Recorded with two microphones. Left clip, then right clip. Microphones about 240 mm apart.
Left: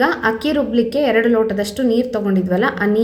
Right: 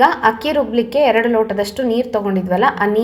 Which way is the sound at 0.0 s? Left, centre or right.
Centre.